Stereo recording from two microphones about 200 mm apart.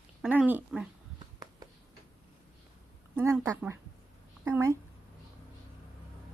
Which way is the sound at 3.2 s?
15° right (ahead or behind).